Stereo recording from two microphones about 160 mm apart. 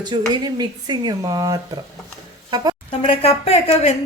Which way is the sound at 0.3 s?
25° right (ahead or behind).